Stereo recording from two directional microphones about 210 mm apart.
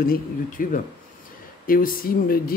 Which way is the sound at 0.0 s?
40° left (ahead or behind).